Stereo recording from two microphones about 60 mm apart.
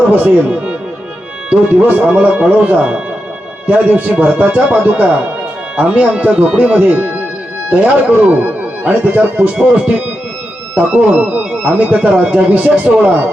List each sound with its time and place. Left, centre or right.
0.1 s speech: right
1.5 s speech: right
9.6 s speech: centre